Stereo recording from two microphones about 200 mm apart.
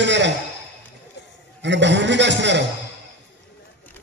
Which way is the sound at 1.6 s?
60° right (ahead or behind).